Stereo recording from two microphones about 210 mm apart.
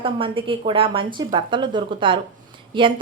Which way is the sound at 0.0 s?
25° right (ahead or behind).